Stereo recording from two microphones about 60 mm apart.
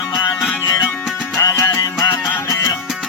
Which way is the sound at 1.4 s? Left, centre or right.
Left.